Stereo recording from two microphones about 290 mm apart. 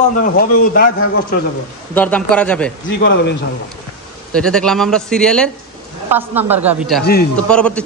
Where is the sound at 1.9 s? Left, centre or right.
Centre.